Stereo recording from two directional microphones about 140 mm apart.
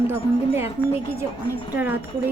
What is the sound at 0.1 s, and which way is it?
Speech, 15° right (ahead or behind).